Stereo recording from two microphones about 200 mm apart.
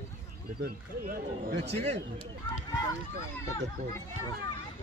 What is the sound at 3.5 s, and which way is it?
Speech, 15° left (ahead or behind).